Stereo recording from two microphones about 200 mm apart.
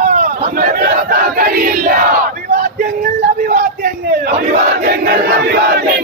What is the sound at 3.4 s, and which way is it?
Battle cry, 45° right (ahead or behind).